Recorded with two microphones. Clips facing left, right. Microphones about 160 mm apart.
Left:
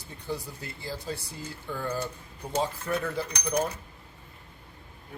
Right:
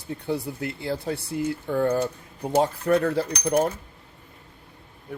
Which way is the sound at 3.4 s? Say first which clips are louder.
Right 6 dB; 50° right (ahead or behind).